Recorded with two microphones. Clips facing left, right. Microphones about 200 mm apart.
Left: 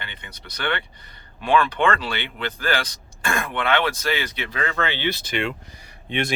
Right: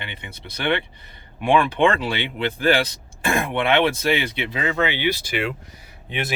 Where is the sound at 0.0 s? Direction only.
25° right (ahead or behind).